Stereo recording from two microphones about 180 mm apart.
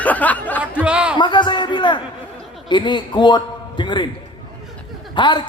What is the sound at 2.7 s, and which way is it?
A man's voice, 25° left (ahead or behind).